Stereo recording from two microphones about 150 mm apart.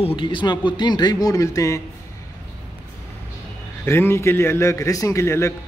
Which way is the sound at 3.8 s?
15° left (ahead or behind).